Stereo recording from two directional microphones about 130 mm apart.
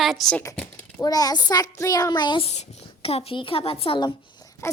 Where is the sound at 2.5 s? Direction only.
50° left (ahead or behind).